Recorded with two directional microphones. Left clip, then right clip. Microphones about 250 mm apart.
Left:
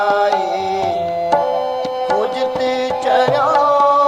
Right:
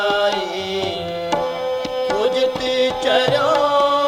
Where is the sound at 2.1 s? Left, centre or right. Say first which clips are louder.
Even; left.